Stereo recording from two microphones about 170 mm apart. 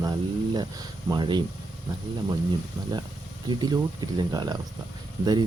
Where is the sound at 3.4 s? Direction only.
25° right (ahead or behind).